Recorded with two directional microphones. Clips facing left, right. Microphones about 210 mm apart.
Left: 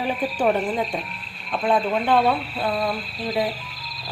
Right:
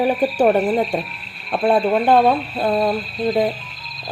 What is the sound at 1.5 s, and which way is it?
Speech, 60° right (ahead or behind).